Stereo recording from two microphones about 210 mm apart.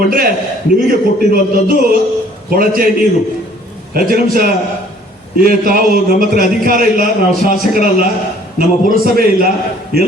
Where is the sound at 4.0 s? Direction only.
45° right (ahead or behind).